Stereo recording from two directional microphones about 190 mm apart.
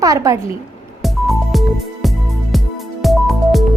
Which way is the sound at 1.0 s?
Centre (ahead or behind).